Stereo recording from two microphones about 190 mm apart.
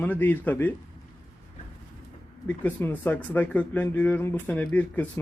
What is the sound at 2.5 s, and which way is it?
Speech, 10° left (ahead or behind).